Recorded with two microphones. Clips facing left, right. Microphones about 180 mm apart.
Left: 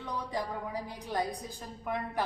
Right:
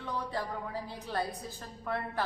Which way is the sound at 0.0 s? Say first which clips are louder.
Even; 15° left (ahead or behind).